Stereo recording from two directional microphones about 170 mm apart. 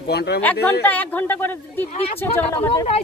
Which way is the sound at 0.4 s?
10° left (ahead or behind).